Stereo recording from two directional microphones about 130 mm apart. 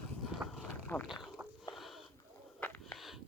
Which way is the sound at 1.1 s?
Centre (ahead or behind).